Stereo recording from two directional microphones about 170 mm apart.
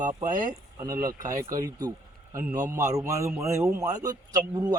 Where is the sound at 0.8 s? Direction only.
20° right (ahead or behind).